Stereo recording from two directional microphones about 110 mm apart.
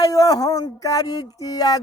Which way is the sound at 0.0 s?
35° left (ahead or behind).